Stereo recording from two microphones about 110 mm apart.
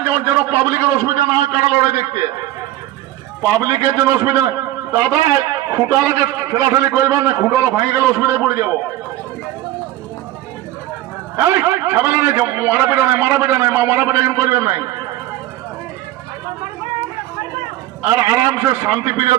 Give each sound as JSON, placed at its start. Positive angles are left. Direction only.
{"t": 0.1, "sound": "a man's voice", "side_deg": -25}
{"t": 3.4, "sound": "a man's voice", "side_deg": -30}
{"t": 11.3, "sound": "a man's voice", "side_deg": -25}
{"t": 18.1, "sound": "a man's voice", "side_deg": -30}